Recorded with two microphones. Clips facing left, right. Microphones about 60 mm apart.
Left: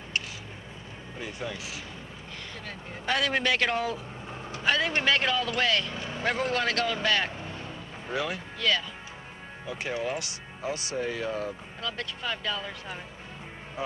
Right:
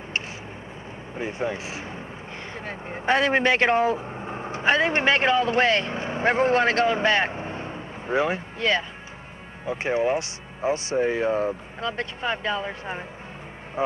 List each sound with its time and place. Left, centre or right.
1.1 s speech: right